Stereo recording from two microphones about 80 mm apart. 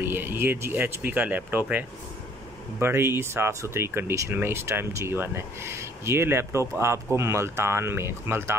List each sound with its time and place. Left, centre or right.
0.0 s speech: right